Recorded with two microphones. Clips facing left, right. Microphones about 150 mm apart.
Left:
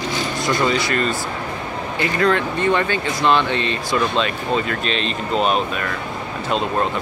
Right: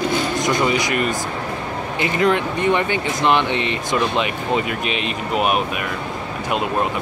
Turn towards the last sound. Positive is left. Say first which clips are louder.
# even
turn(degrees=-15)  # may be behind; listen again after turning